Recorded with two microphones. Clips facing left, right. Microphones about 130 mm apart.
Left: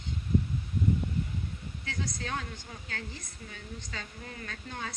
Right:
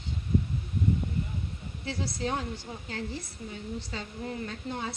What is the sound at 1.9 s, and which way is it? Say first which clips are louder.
A woman's voice: right 5 dB; 30° right (ahead or behind).